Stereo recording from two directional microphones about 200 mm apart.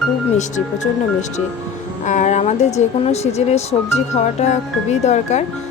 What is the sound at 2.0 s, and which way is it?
Speech, 40° left (ahead or behind).